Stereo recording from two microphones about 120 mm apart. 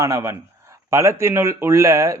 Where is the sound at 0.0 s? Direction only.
25° right (ahead or behind).